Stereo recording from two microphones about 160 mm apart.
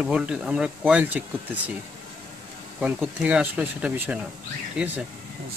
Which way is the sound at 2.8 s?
10° right (ahead or behind).